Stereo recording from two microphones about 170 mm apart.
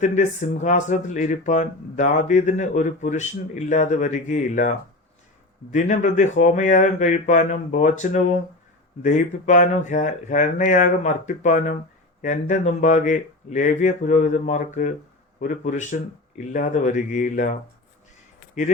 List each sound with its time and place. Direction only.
0.0 s speech: 45° left (ahead or behind)
5.7 s speech: 45° left (ahead or behind)